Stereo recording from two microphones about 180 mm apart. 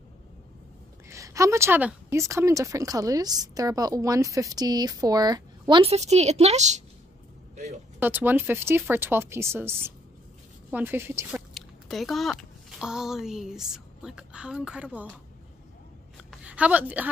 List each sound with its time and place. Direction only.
1.0 s a woman's voice: 15° right (ahead or behind); by 6.8 s 40° right (ahead or behind)
8.0 s a woman's voice: 10° right (ahead or behind)
11.5 s speech: centre (ahead or behind)
16.3 s a woman's voice: 5° right (ahead or behind)